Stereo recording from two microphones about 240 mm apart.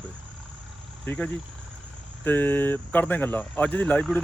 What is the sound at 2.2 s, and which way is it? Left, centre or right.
Speech, centre.